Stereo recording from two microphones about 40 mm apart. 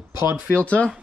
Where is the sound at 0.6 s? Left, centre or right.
Left.